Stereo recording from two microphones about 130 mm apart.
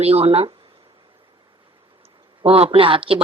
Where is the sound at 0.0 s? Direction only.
50° right (ahead or behind).